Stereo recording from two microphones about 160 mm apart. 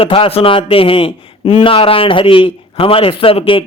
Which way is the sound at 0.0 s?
35° left (ahead or behind).